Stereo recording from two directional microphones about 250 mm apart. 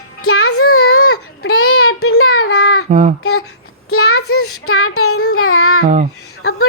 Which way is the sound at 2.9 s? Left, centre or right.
Right.